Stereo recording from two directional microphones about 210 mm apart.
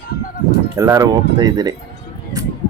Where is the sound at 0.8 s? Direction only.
15° right (ahead or behind).